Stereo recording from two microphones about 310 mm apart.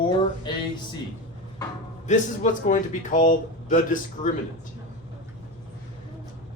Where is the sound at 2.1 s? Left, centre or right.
Left.